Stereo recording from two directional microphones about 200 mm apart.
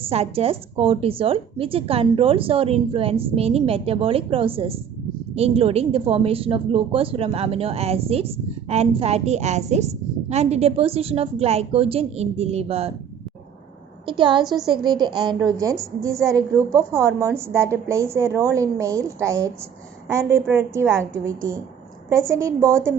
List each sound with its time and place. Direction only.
0.1 s a woman's voice: 30° right (ahead or behind)
14.1 s a woman's voice: 25° right (ahead or behind)
14.4 s a woman's voice: centre (ahead or behind)
14.7 s a woman's voice: 20° right (ahead or behind)